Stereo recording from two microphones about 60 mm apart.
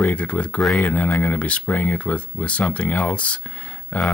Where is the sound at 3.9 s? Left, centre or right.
Left.